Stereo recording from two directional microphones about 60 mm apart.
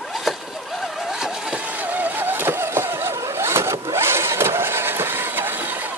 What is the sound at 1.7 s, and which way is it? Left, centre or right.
Vehicle, right.